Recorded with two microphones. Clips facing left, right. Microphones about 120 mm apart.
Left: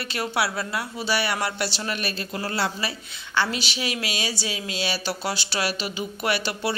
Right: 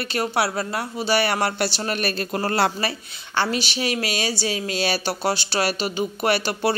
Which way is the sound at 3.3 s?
35° right (ahead or behind).